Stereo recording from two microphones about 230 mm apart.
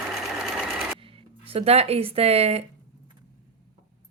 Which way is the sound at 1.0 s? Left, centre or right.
Right.